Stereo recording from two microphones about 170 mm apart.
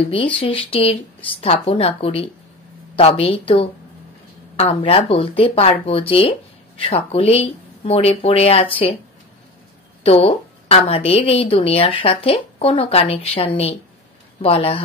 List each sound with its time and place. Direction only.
0.1 s a woman's voice: 30° left (ahead or behind)
10.0 s a woman's voice: 35° left (ahead or behind)